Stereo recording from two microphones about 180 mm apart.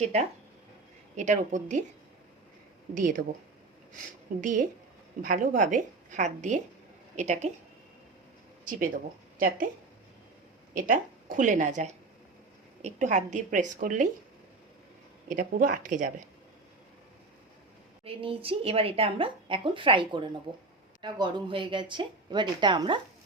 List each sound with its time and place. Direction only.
0.0 s a woman's voice: 40° right (ahead or behind)
2.9 s a woman's voice: 45° right (ahead or behind)
8.6 s speech: 50° right (ahead or behind)
10.8 s a woman's voice: 50° right (ahead or behind)
15.3 s a woman's voice: 50° right (ahead or behind)
18.0 s a woman's voice: 30° right (ahead or behind)